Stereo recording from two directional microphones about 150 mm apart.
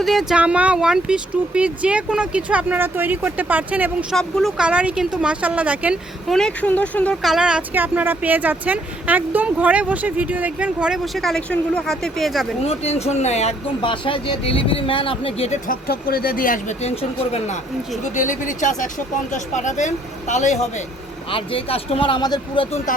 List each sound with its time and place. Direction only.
0.0 s speech: centre (ahead or behind)
4.1 s speech: centre (ahead or behind)
7.2 s speech: 5° right (ahead or behind)
12.6 s speech: 45° left (ahead or behind); by 16.7 s 65° left (ahead or behind)
16.8 s speech: 40° left (ahead or behind)
21.2 s speech: 35° left (ahead or behind)